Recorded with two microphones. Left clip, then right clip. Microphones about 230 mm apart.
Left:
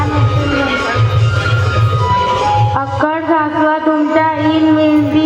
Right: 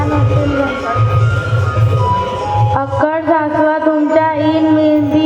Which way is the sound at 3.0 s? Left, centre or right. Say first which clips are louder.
Even; right.